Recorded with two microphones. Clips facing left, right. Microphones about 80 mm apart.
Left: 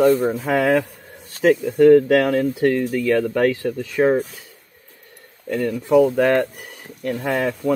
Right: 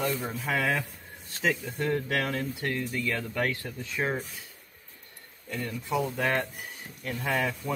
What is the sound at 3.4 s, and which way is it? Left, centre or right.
Speech, left.